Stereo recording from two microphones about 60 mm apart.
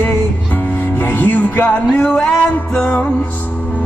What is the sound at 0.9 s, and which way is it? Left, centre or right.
Music, left.